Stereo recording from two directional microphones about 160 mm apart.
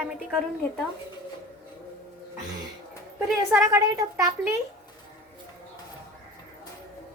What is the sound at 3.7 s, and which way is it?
Speech, 20° right (ahead or behind).